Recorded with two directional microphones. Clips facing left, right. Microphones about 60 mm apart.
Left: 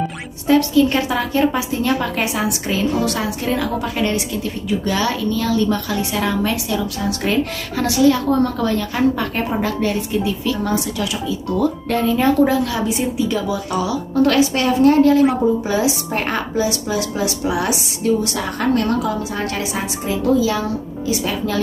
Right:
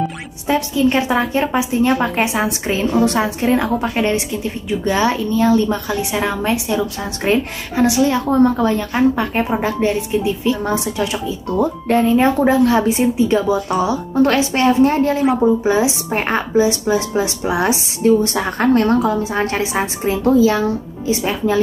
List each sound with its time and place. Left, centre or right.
0.5 s a woman's voice: right